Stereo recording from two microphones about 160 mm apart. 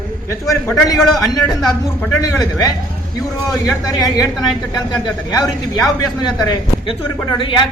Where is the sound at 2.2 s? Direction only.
20° left (ahead or behind).